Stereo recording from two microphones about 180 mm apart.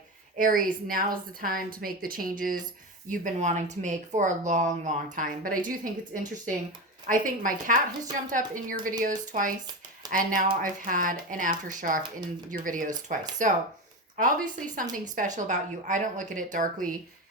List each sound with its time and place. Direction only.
0.3 s speech: 50° right (ahead or behind)